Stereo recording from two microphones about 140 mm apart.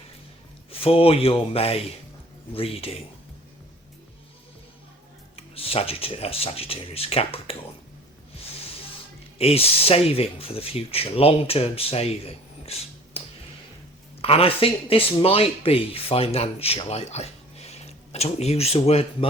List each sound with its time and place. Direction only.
0.7 s speech: 40° left (ahead or behind)
5.4 s speech: 45° left (ahead or behind)
9.4 s speech: 45° left (ahead or behind)